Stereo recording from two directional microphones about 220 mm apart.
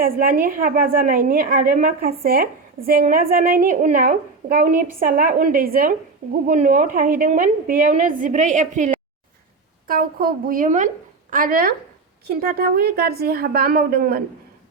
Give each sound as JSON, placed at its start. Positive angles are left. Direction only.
{"t": 0.0, "sound": "a woman's voice", "side_deg": -40}